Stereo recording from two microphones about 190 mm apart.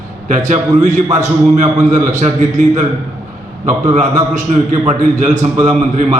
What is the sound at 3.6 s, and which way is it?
Speech, 40° right (ahead or behind).